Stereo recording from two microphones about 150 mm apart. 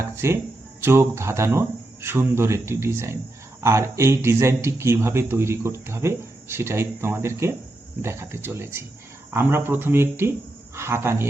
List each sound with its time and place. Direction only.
0.0 s speech: 20° right (ahead or behind)